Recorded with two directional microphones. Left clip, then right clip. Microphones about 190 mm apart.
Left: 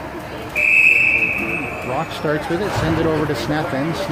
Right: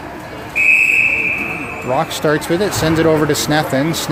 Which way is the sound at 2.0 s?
45° right (ahead or behind).